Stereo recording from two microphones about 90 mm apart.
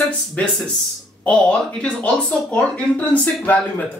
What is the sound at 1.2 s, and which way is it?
Speech, 15° left (ahead or behind).